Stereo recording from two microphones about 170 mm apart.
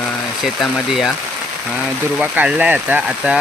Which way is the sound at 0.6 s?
Centre (ahead or behind).